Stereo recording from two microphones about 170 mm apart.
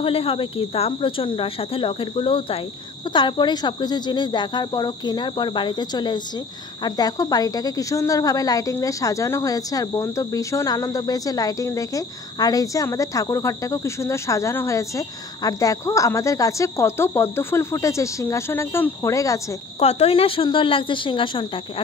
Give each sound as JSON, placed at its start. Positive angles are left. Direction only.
{"t": 0.0, "sound": "speech", "side_deg": 35}
{"t": 19.8, "sound": "speech", "side_deg": 35}